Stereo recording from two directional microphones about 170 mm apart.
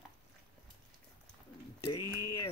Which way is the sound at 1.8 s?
25° left (ahead or behind).